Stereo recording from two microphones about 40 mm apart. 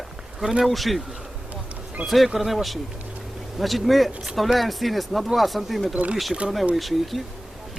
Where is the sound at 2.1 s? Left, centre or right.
Centre.